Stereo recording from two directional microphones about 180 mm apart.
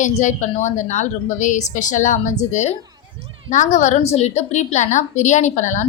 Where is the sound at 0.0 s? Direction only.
40° left (ahead or behind).